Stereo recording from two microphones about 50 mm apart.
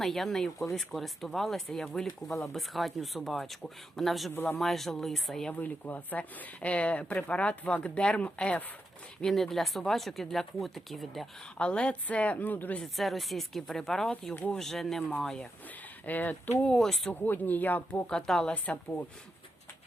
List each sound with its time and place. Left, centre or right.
0.0 s speech: centre
5.5 s speech: left
9.2 s speech: centre
11.5 s speech: left
13.0 s speech: centre
16.0 s speech: left
16.6 s speech: centre
17.2 s speech: left
18.1 s speech: centre
18.5 s speech: left